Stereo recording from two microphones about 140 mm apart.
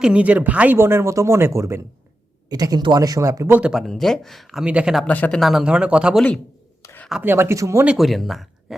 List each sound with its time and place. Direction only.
0.0 s speech: 10° right (ahead or behind)
3.6 s speech: 5° right (ahead or behind)
5.0 s speech: 10° left (ahead or behind)
5.4 s speech: centre (ahead or behind)
6.8 s a sound: 15° left (ahead or behind)
7.2 s speech: 15° right (ahead or behind)
7.9 s speech: centre (ahead or behind)